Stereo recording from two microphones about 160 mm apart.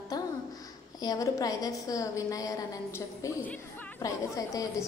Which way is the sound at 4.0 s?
20° left (ahead or behind).